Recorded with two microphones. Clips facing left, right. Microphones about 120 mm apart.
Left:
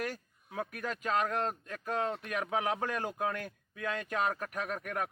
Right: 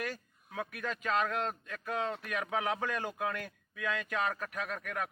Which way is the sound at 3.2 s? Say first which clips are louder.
Left 1 dB; 30° left (ahead or behind).